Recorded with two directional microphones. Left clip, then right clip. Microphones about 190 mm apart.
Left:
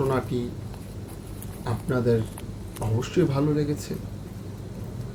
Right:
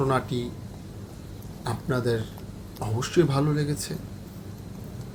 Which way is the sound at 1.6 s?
50° right (ahead or behind).